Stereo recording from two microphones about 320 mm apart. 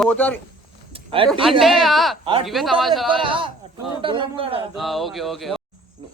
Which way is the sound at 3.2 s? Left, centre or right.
Centre.